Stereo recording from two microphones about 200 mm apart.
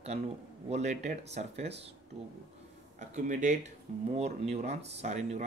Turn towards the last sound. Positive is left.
turn(degrees=-35)  # may be behind; listen again after turning